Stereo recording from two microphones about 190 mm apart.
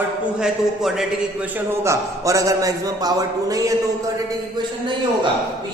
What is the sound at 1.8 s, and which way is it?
A man's voice, 15° right (ahead or behind).